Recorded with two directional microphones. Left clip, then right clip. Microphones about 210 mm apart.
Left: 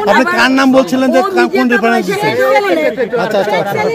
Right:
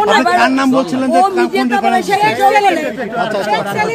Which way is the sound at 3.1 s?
50° left (ahead or behind).